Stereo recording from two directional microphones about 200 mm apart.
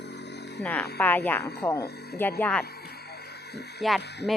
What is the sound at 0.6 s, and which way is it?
Speech, 5° left (ahead or behind).